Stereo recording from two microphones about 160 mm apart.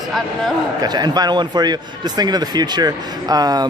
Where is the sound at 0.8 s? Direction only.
25° right (ahead or behind).